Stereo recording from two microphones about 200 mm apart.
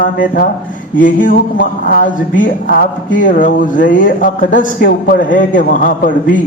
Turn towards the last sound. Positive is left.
turn(degrees=40)  # may be behind; listen again after turning